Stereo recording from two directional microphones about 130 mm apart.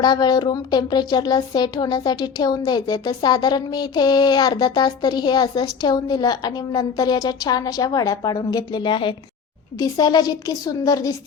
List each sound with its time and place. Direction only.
0.0 s speech: 30° left (ahead or behind)
9.7 s a woman's voice: 30° left (ahead or behind)